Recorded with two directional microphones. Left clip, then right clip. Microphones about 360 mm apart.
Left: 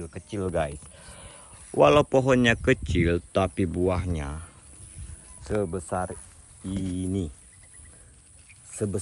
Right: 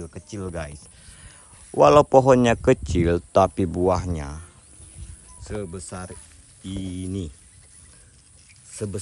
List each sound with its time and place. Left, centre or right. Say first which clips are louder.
0.0 s speech: left 2 dB; centre
5.6 s speech: left 7 dB; centre
8.7 s speech: left 1 dB; centre